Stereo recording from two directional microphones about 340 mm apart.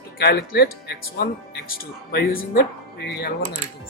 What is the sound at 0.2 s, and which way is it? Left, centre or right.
Speech, left.